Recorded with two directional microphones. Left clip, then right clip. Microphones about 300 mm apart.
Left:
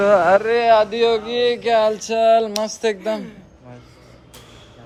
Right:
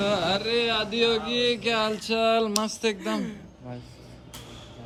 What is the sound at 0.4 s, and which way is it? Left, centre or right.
Speech, centre.